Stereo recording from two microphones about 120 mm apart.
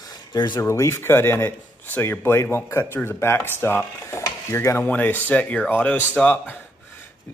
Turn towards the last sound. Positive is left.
turn(degrees=10)  # may be behind; listen again after turning